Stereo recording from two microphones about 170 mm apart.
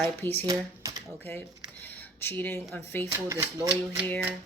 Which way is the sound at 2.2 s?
10° left (ahead or behind).